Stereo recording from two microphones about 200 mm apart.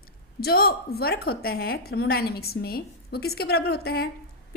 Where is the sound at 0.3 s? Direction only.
50° left (ahead or behind).